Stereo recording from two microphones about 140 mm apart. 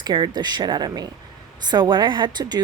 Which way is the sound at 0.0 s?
30° right (ahead or behind).